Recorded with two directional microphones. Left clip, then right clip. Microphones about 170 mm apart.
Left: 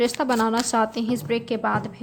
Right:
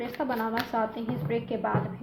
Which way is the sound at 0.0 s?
65° left (ahead or behind).